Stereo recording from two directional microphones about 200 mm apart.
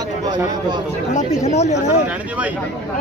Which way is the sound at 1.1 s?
35° left (ahead or behind).